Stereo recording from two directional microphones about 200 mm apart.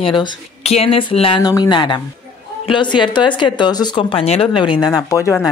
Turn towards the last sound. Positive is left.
turn(degrees=15)  # may be behind; listen again after turning